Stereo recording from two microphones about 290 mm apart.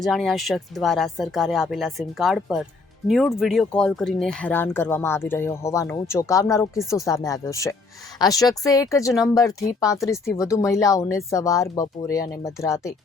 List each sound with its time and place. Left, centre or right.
0.0 s speech: centre